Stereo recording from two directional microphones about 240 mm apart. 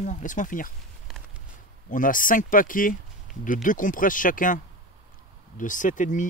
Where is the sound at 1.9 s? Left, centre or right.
Left.